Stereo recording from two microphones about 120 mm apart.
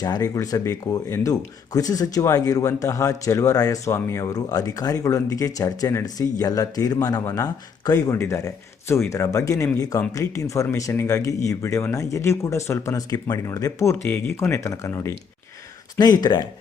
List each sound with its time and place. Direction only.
0.0 s speech: 30° left (ahead or behind)